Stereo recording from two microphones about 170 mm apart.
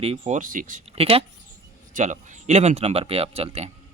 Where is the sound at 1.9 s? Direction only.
45° right (ahead or behind).